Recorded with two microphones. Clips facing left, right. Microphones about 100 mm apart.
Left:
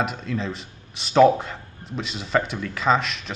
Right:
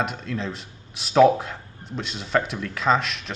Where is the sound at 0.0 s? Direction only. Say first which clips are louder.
Left 1 dB; centre (ahead or behind).